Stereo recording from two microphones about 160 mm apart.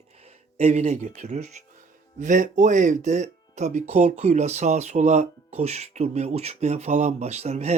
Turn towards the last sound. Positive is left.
turn(degrees=-45)  # may be behind; listen again after turning